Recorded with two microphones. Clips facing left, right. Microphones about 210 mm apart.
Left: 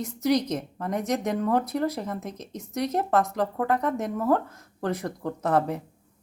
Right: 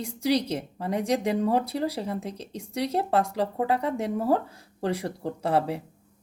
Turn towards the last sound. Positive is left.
turn(degrees=-10)  # may be behind; listen again after turning